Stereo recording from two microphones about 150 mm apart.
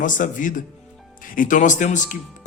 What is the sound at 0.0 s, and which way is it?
Speech, 60° left (ahead or behind).